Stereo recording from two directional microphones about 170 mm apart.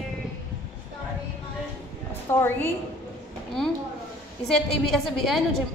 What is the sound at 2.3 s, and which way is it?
Speech, 15° left (ahead or behind).